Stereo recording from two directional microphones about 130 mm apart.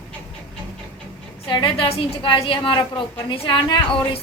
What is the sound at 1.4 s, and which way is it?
A woman's voice, 40° left (ahead or behind).